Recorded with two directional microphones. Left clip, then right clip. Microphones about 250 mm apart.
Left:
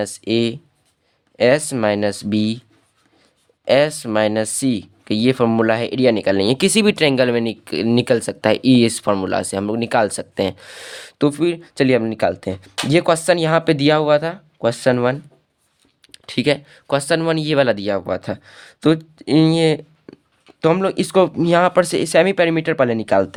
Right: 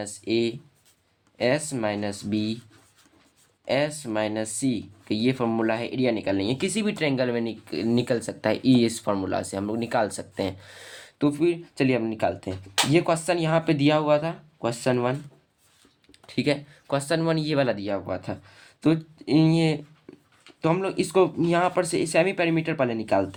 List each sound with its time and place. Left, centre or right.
0.0 s speech: left
3.7 s speech: left
16.1 s speech: left